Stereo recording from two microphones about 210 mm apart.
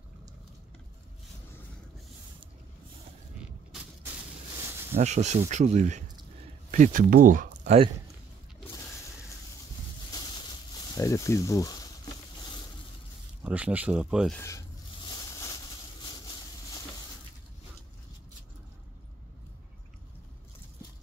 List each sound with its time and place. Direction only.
4.9 s speech: 35° right (ahead or behind)
10.9 s speech: 15° left (ahead or behind)
13.4 s speech: 5° right (ahead or behind)
14.3 s speech: 15° left (ahead or behind)
15.0 s a sound: 15° left (ahead or behind)